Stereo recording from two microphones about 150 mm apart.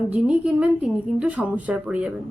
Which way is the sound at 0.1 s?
10° right (ahead or behind).